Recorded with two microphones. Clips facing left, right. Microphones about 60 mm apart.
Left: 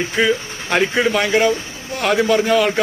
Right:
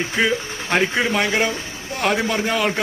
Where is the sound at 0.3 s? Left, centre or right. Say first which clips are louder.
Left 2 dB; centre.